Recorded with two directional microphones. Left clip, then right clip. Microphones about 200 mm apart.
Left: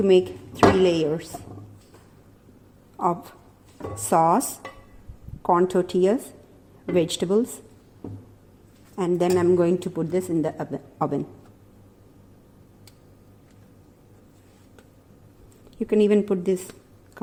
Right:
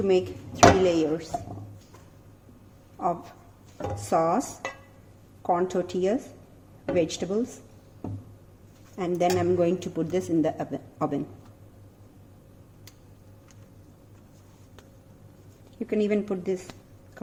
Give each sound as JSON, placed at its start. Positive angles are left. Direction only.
{"t": 0.0, "sound": "speech", "side_deg": 45}
{"t": 3.0, "sound": "speech", "side_deg": 40}
{"t": 9.0, "sound": "speech", "side_deg": 35}
{"t": 15.8, "sound": "speech", "side_deg": 40}